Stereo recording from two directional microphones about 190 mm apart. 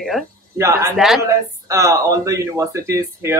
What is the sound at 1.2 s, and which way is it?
Speech, 15° right (ahead or behind).